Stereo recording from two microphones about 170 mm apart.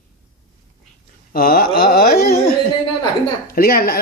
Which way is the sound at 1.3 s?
60° left (ahead or behind).